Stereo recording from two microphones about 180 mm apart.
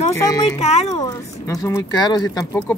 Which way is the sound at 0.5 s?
35° left (ahead or behind).